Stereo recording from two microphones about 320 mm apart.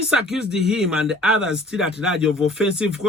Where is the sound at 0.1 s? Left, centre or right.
Centre.